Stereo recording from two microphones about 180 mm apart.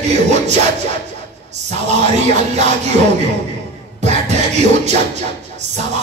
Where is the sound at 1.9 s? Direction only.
40° right (ahead or behind).